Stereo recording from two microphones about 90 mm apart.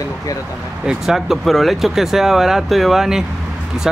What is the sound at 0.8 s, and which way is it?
Speech, 5° right (ahead or behind).